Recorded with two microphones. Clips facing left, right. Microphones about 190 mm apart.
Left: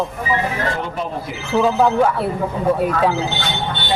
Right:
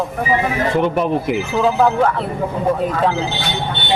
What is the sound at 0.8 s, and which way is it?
Speech, 65° right (ahead or behind).